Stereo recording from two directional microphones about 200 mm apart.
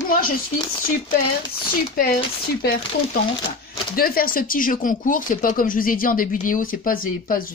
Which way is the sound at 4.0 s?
45° left (ahead or behind).